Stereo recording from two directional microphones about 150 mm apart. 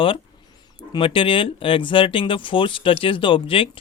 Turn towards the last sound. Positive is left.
turn(degrees=35)  # may be behind; listen again after turning